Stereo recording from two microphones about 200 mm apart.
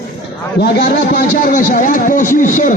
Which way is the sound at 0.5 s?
55° left (ahead or behind).